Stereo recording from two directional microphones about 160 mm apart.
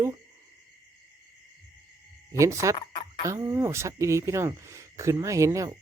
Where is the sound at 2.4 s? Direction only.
20° right (ahead or behind).